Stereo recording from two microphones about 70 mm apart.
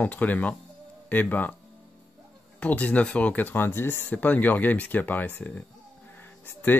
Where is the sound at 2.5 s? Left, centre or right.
Left.